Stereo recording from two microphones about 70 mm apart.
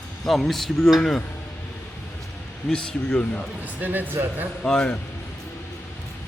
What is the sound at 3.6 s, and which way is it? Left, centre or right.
Speech, right.